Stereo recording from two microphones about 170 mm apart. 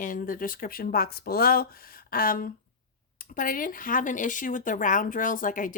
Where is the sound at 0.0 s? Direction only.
55° left (ahead or behind).